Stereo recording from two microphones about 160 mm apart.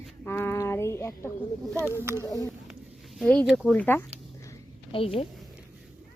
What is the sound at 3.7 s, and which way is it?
Speech, 10° left (ahead or behind).